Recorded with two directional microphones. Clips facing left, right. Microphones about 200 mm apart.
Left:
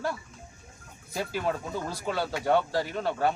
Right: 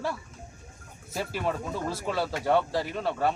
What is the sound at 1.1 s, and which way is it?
Speech, centre (ahead or behind).